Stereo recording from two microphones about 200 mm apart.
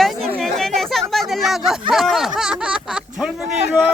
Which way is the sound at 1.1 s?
Centre (ahead or behind).